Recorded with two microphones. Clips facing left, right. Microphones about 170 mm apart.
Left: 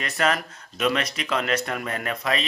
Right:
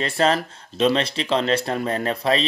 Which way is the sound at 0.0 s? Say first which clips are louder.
Right 4 dB; 30° right (ahead or behind).